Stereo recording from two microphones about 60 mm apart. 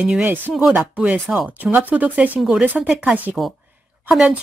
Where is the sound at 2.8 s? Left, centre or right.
Centre.